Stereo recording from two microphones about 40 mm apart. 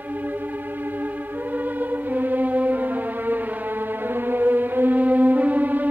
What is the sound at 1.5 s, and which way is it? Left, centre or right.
Music, right.